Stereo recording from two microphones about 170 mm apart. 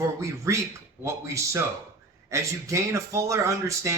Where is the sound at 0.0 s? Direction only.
20° right (ahead or behind).